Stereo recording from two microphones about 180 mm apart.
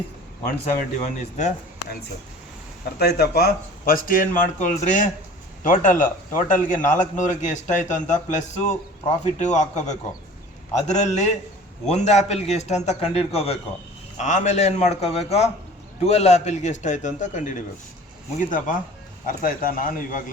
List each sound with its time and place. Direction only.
0.6 s a man's voice: 40° left (ahead or behind)
3.0 s a man's voice: 60° left (ahead or behind)